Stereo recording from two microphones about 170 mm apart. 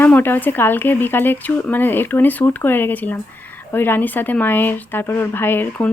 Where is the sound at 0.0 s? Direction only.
10° left (ahead or behind).